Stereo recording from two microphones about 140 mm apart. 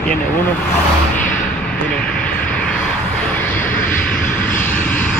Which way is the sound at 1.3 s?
70° left (ahead or behind).